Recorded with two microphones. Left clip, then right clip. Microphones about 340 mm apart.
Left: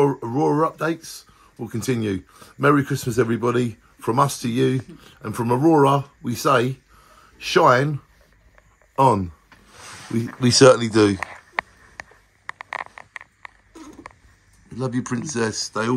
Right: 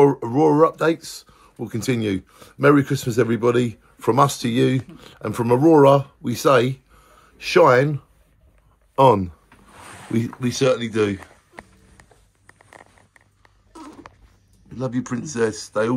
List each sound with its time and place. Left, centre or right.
0.0 s speech: centre
10.4 s speech: left
14.7 s speech: centre